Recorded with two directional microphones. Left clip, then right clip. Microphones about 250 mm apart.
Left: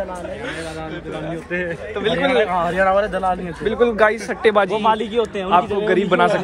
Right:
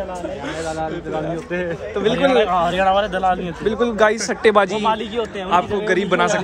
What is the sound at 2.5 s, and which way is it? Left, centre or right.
Speech, centre.